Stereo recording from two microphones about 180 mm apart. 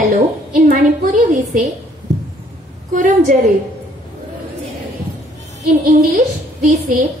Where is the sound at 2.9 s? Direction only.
45° right (ahead or behind).